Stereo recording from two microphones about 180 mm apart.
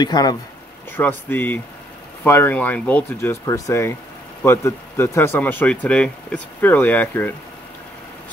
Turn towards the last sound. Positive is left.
turn(degrees=10)  # may be behind; listen again after turning